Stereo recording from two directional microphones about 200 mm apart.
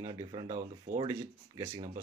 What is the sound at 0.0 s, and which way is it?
Speech, 20° right (ahead or behind).